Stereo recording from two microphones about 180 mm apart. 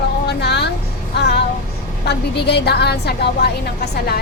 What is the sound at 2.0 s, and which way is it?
A woman's voice, 70° left (ahead or behind).